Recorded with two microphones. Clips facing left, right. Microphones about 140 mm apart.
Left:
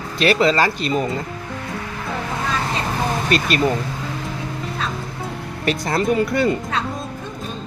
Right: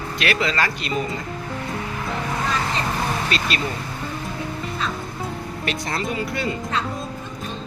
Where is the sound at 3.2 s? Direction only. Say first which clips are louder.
Left 5 dB; 50° left (ahead or behind).